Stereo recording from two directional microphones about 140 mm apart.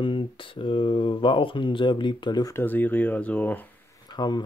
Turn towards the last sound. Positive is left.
turn(degrees=30)  # may be behind; listen again after turning